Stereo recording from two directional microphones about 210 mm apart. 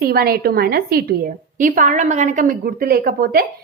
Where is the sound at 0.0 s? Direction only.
45° right (ahead or behind).